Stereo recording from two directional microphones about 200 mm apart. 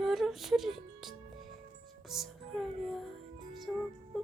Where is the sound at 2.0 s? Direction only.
Centre (ahead or behind).